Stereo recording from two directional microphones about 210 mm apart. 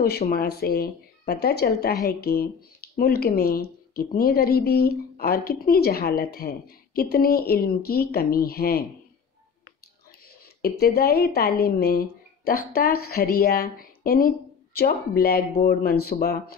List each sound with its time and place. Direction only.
0.0 s speech: 50° left (ahead or behind)
10.6 s speech: 45° left (ahead or behind)